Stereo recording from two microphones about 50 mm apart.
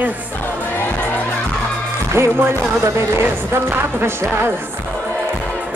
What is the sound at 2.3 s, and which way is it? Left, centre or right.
Speech, right.